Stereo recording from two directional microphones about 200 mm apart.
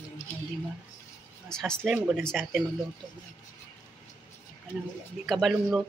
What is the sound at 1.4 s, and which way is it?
A woman's voice, 5° left (ahead or behind).